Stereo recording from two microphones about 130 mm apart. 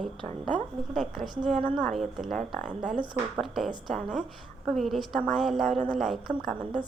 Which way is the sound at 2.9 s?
40° right (ahead or behind).